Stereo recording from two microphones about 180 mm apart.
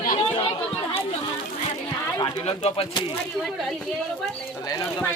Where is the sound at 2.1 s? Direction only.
25° left (ahead or behind).